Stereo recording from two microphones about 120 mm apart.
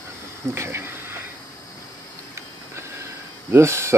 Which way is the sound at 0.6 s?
20° right (ahead or behind).